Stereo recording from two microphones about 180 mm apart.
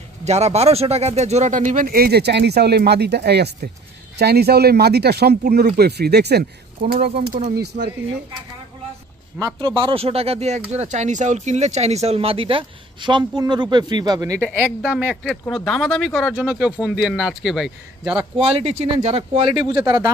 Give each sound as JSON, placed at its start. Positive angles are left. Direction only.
{"t": 0.2, "sound": "speech", "side_deg": -35}
{"t": 7.3, "sound": "speech", "side_deg": -45}
{"t": 9.8, "sound": "a man's voice", "side_deg": -30}
{"t": 18.4, "sound": "speech", "side_deg": -35}
{"t": 19.7, "sound": "speech", "side_deg": -20}